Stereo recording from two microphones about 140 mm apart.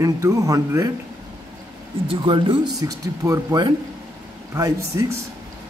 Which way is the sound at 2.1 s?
40° right (ahead or behind).